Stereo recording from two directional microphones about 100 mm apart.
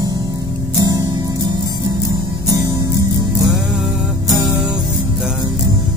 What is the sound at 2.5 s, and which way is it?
Music, 40° right (ahead or behind).